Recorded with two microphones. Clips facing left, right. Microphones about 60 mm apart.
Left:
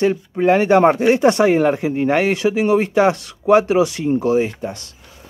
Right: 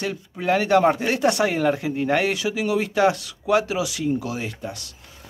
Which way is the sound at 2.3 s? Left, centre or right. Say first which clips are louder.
Left 7 dB; left.